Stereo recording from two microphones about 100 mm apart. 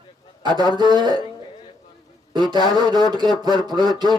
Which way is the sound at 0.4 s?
50° right (ahead or behind).